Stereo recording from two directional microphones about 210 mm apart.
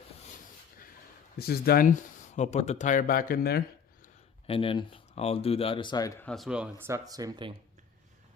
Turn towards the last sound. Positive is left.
turn(degrees=-20)  # may be behind; listen again after turning